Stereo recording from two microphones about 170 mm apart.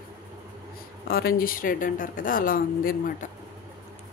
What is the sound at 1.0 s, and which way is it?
Speech, 60° left (ahead or behind).